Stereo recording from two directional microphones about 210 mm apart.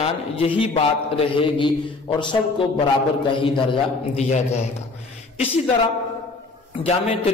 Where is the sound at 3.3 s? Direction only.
25° left (ahead or behind).